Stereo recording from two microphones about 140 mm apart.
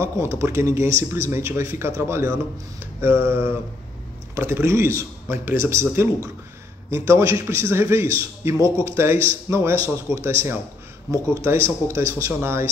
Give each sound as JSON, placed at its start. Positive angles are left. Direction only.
{"t": 0.3, "sound": "a man's voice", "side_deg": -15}